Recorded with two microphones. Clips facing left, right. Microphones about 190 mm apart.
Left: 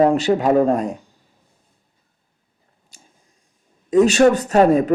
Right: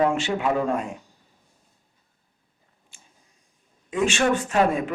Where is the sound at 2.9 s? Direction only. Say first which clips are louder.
Left 6 dB; 40° left (ahead or behind).